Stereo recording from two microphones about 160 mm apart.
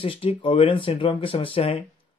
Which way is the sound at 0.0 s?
35° left (ahead or behind).